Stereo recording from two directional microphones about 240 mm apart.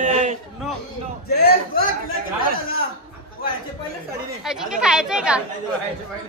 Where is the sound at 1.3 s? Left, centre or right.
Left.